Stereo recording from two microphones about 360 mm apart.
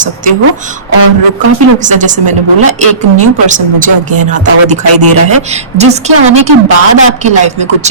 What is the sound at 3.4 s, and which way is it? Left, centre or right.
Speech, right.